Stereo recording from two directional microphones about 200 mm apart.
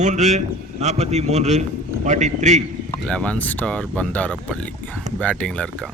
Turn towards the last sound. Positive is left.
turn(degrees=5)  # may be behind; listen again after turning